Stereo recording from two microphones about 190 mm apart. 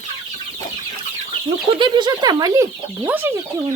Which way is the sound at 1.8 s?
25° right (ahead or behind).